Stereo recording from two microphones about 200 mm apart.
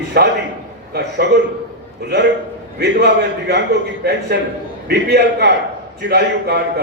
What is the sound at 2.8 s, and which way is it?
A man's voice, 60° right (ahead or behind).